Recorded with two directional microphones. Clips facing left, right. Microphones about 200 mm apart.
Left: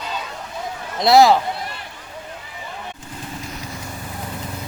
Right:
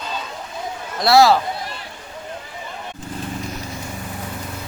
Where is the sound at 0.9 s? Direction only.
20° left (ahead or behind).